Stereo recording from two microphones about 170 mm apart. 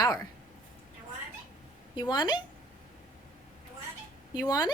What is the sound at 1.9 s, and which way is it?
Speech, 25° left (ahead or behind).